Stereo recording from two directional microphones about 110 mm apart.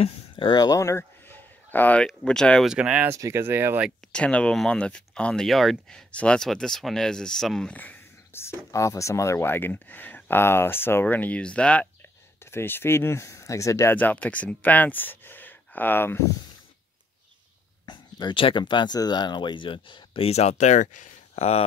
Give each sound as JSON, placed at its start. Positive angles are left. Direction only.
{"t": 0.0, "sound": "a sound", "side_deg": 50}
{"t": 0.6, "sound": "a sound", "side_deg": 30}
{"t": 2.0, "sound": "speech", "side_deg": 5}
{"t": 2.7, "sound": "speech", "side_deg": -10}
{"t": 3.1, "sound": "speech", "side_deg": -25}
{"t": 4.1, "sound": "speech", "side_deg": 10}
{"t": 7.7, "sound": "speech", "side_deg": 15}
{"t": 13.9, "sound": "speech", "side_deg": 15}
{"t": 17.8, "sound": "speech", "side_deg": 40}
{"t": 21.4, "sound": "speech", "side_deg": 70}